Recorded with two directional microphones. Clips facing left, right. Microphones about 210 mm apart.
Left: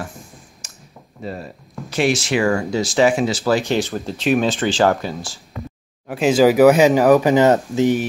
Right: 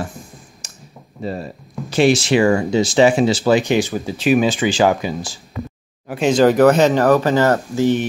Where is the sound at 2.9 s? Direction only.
30° right (ahead or behind).